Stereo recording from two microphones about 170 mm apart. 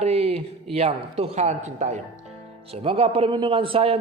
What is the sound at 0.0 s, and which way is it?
A man's voice, 35° right (ahead or behind).